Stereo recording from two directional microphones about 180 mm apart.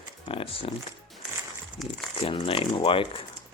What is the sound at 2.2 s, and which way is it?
Speech, 30° left (ahead or behind).